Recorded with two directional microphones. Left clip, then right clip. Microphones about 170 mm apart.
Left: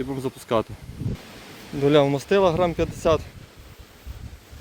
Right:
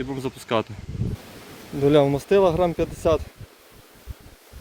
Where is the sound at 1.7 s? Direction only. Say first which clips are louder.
Even; 5° right (ahead or behind).